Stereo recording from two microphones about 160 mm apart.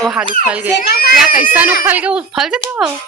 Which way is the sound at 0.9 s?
75° left (ahead or behind).